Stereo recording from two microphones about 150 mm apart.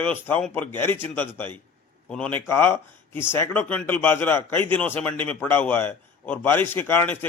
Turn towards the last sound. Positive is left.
turn(degrees=15)  # may be behind; listen again after turning